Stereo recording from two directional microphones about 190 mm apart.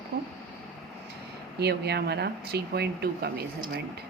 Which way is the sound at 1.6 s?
60° right (ahead or behind).